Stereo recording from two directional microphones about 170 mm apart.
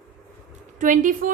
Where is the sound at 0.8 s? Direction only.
50° right (ahead or behind).